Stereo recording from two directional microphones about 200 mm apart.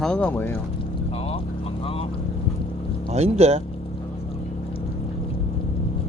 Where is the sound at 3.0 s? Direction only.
30° right (ahead or behind).